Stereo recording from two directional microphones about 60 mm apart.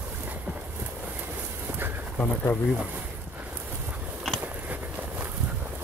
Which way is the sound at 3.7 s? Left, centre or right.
Right.